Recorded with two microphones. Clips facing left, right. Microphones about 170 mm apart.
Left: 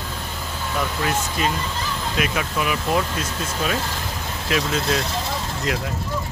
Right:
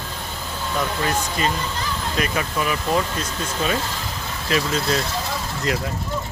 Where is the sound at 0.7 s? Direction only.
5° left (ahead or behind).